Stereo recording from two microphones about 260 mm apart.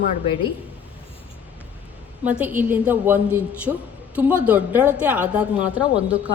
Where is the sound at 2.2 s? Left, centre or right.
Centre.